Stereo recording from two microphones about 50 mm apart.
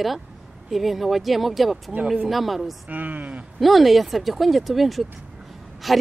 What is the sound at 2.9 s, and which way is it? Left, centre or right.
Speech, right.